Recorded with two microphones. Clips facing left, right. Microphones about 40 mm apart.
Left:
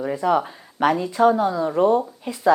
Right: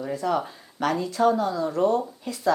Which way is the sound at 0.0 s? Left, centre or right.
Left.